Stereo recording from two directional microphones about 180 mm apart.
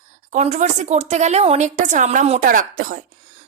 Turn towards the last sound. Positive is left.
turn(degrees=-50)  # may be behind; listen again after turning